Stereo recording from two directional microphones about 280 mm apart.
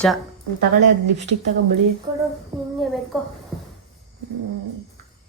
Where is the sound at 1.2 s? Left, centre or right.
Right.